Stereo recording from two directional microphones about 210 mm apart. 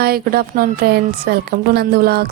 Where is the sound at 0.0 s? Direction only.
45° right (ahead or behind).